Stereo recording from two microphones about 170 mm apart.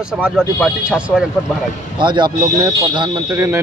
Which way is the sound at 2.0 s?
25° right (ahead or behind).